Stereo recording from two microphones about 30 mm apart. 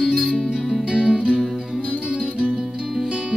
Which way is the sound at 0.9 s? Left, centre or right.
Right.